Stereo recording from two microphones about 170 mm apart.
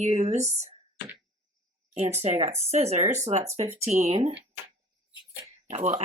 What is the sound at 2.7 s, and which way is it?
Speech, 40° right (ahead or behind).